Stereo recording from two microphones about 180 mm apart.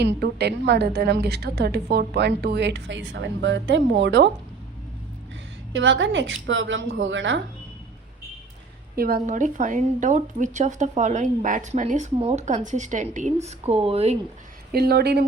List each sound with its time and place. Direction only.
0.0 s a woman's voice: 65° right (ahead or behind)
5.7 s a woman's voice: 90° right
9.0 s speech: 55° right (ahead or behind); by 14.2 s 35° right (ahead or behind)
14.7 s speech: 60° right (ahead or behind)